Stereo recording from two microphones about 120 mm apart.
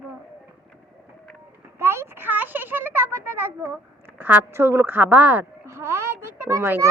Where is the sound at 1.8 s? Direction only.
20° right (ahead or behind).